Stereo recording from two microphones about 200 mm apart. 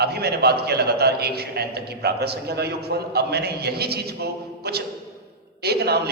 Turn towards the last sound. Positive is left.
turn(degrees=-55)  # may be behind; listen again after turning